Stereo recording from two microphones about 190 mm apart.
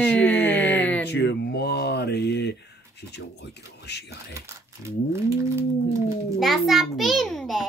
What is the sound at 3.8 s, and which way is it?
Speech, 60° left (ahead or behind).